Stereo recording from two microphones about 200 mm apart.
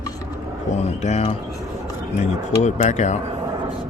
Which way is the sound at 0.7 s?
35° left (ahead or behind).